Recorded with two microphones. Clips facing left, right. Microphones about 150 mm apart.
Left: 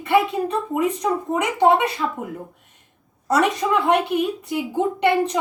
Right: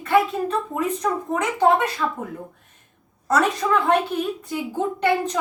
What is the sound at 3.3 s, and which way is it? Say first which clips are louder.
Speech: left 1 dB; 10° left (ahead or behind).